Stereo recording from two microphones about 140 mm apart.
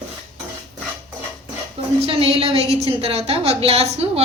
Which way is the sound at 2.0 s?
45° right (ahead or behind).